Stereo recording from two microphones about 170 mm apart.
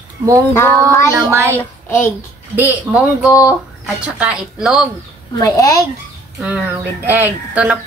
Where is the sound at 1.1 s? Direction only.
20° right (ahead or behind).